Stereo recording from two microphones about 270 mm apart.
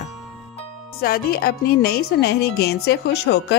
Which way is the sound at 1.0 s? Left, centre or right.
Left.